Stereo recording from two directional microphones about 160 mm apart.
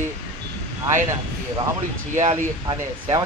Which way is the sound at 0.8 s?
25° right (ahead or behind).